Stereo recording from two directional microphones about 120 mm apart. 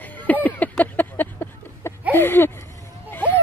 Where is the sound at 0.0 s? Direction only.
15° left (ahead or behind).